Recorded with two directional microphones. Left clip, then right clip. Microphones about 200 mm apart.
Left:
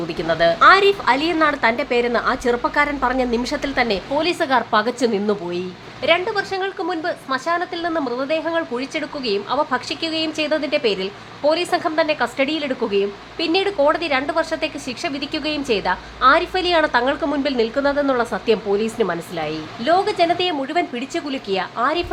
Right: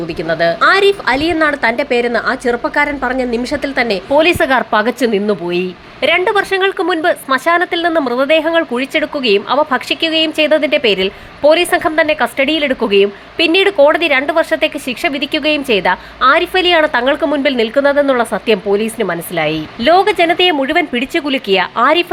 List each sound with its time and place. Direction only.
0.2 s speech: 10° right (ahead or behind)
5.5 s speech: 25° right (ahead or behind)